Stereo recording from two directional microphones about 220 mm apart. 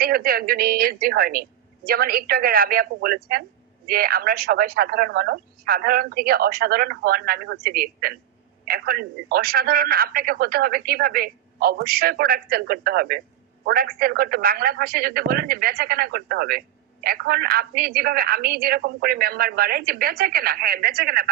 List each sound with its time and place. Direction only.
0.0 s a man's voice: 45° right (ahead or behind)